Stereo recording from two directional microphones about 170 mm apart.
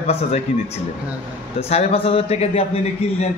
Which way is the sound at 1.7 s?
35° left (ahead or behind).